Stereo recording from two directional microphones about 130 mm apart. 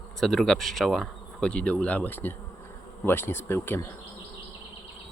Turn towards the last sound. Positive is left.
turn(degrees=15)  # may be behind; listen again after turning